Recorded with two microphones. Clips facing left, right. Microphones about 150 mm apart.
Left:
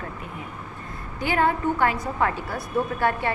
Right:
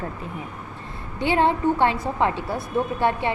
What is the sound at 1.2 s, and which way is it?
A woman's voice, 25° right (ahead or behind).